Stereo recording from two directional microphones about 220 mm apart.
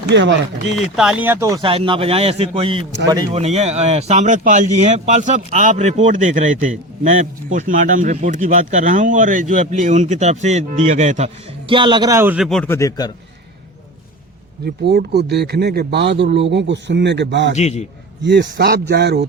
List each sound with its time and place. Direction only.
0.1 s speech: 55° right (ahead or behind)
0.9 s speech: 5° right (ahead or behind)
1.6 s a man's voice: 25° right (ahead or behind)
11.7 s a man's voice: 20° right (ahead or behind); by 13.1 s 15° left (ahead or behind)
14.6 s speech: 45° right (ahead or behind)
17.6 s a man's voice: 30° left (ahead or behind)
18.2 s speech: 50° right (ahead or behind)